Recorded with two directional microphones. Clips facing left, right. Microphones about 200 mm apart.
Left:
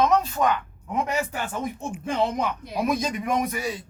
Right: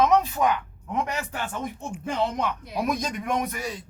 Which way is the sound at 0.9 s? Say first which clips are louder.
Left 3 dB; 10° left (ahead or behind).